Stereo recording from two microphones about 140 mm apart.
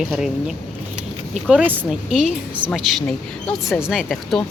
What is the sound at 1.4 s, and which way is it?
Speech, 5° right (ahead or behind).